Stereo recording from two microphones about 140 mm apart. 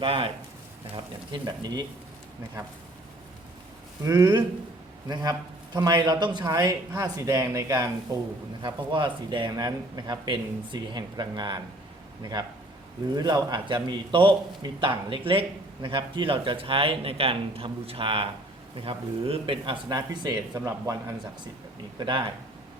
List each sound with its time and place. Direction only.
0.0 s a man's voice: 40° right (ahead or behind)
4.0 s a man's voice: 25° right (ahead or behind)